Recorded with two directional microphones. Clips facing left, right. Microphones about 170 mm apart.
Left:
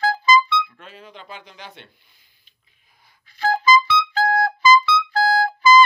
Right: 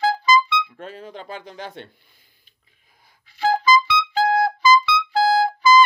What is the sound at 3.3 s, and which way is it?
Music, 10° right (ahead or behind).